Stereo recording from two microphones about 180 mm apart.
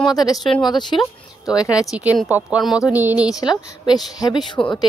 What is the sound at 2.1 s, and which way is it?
Speech, 5° right (ahead or behind).